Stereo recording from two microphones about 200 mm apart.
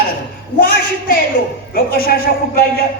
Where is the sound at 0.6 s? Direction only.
45° left (ahead or behind).